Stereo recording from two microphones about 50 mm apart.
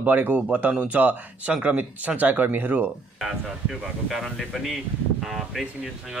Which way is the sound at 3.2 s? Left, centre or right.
Centre.